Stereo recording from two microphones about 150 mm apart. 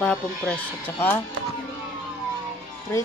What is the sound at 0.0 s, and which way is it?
Speech, 10° left (ahead or behind).